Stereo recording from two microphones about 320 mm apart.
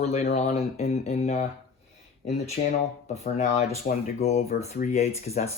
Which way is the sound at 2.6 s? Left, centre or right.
Left.